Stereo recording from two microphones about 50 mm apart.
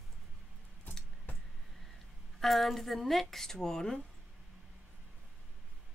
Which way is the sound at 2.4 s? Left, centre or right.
Centre.